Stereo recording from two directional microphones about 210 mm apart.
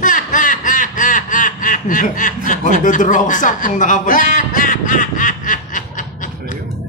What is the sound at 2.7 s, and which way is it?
Speech, 40° left (ahead or behind).